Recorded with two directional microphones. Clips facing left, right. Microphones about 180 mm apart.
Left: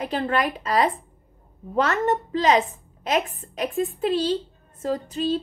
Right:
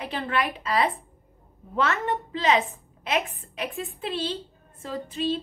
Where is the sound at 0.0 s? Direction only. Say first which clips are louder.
Left 4 dB; 45° left (ahead or behind).